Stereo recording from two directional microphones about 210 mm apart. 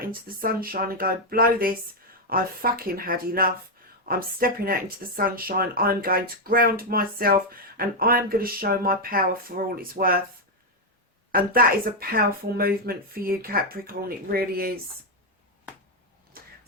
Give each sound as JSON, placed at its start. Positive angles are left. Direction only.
{"t": 0.0, "sound": "speech", "side_deg": -45}
{"t": 11.3, "sound": "speech", "side_deg": -45}